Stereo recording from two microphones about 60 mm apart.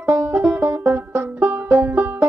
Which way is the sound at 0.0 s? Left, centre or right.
Right.